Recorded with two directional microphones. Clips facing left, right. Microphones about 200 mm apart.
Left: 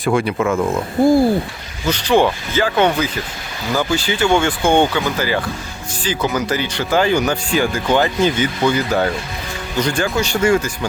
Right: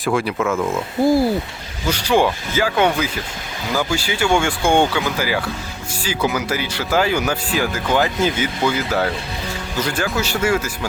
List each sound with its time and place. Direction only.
0.0 s speech: centre (ahead or behind)
0.5 s speech: 15° left (ahead or behind)
1.0 s speech: centre (ahead or behind)